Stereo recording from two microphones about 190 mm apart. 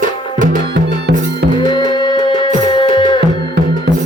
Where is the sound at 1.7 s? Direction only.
25° left (ahead or behind).